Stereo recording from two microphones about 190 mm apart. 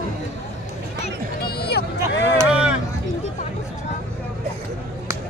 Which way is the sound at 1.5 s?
55° left (ahead or behind).